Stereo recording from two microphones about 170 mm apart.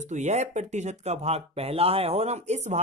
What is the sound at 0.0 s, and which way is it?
Speech, 45° right (ahead or behind).